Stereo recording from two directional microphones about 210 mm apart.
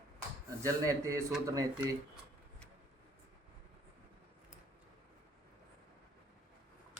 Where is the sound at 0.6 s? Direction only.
15° right (ahead or behind).